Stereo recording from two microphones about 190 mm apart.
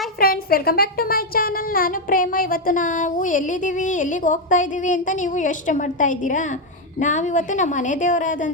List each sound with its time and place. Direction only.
0.2 s music: 50° left (ahead or behind)
7.0 s a woman's voice: 40° left (ahead or behind)